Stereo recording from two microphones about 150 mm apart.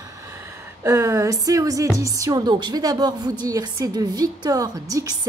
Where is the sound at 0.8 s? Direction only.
20° right (ahead or behind).